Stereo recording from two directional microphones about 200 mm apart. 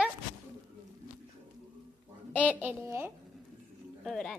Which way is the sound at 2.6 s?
10° right (ahead or behind).